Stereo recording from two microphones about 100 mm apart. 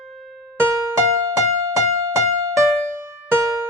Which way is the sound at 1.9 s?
35° right (ahead or behind).